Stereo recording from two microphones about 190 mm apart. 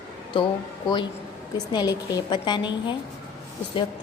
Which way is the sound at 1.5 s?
20° left (ahead or behind).